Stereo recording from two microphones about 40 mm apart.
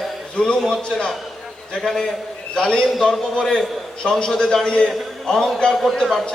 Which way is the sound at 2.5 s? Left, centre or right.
Left.